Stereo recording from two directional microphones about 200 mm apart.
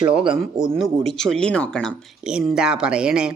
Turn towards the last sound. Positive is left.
turn(degrees=-5)  # may be behind; listen again after turning